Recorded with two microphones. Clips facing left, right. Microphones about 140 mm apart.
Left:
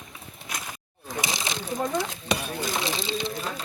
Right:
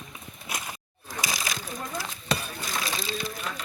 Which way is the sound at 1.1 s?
25° left (ahead or behind).